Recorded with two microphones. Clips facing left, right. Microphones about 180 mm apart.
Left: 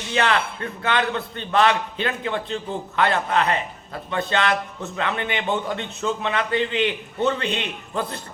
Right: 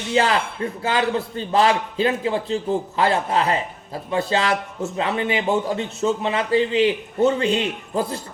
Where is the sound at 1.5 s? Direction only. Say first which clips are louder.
Right 1 dB; 30° right (ahead or behind).